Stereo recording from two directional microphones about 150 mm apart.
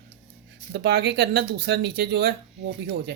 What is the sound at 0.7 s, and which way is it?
Speech, 90° right.